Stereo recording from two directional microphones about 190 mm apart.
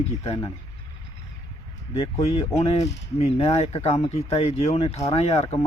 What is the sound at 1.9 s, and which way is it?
Speech, 30° left (ahead or behind).